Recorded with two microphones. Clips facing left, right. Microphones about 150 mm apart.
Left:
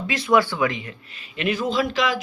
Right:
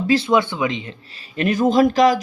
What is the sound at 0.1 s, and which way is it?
Speech, 25° right (ahead or behind).